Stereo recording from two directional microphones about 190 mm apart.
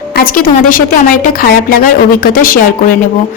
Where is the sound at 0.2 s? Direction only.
50° left (ahead or behind).